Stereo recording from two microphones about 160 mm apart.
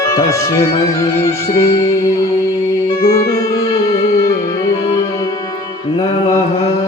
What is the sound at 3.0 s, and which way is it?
Music, 70° left (ahead or behind).